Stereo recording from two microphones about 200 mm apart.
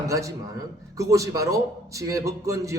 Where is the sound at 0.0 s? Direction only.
15° right (ahead or behind).